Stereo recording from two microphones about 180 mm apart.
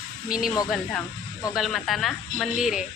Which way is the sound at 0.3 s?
5° right (ahead or behind).